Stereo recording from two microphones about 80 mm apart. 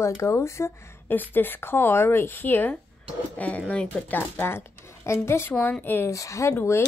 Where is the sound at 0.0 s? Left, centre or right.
Left.